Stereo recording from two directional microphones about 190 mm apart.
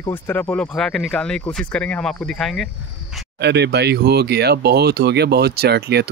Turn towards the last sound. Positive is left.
turn(degrees=-60)  # may be behind; listen again after turning